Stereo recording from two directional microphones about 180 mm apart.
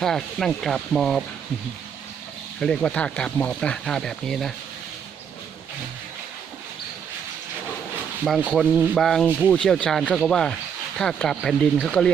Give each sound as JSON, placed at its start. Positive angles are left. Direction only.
{"t": 0.0, "sound": "speech", "side_deg": 0}
{"t": 2.6, "sound": "speech", "side_deg": 5}
{"t": 8.2, "sound": "speech", "side_deg": -5}